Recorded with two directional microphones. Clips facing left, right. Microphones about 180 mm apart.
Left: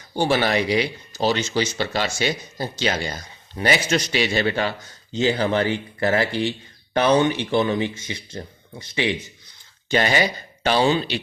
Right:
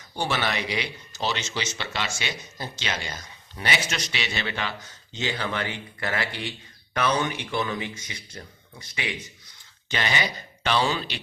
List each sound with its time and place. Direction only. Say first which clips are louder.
0.1 s speech: left 8 dB; 35° left (ahead or behind)
9.9 s speech: left 8 dB; 40° left (ahead or behind)